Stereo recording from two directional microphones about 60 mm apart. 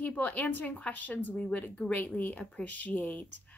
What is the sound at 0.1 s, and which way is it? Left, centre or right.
A woman's voice, left.